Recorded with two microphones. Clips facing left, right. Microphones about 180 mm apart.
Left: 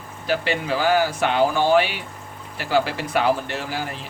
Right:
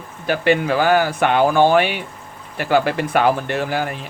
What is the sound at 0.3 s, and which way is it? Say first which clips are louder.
Speech: right 6 dB; 55° right (ahead or behind).